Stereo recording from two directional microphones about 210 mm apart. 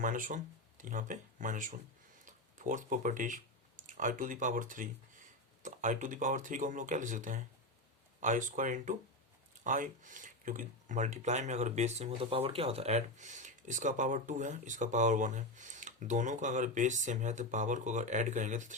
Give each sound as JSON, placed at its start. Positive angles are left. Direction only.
{"t": 0.0, "sound": "speech", "side_deg": -40}